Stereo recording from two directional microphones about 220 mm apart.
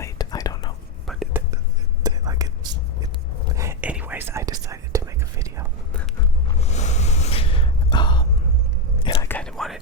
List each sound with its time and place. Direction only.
0.0 s whispering: 15° left (ahead or behind)
1.0 s whispering: centre (ahead or behind)
2.0 s whispering: 15° right (ahead or behind)
6.6 s a sound: 30° left (ahead or behind)
9.2 s whispering: 5° left (ahead or behind)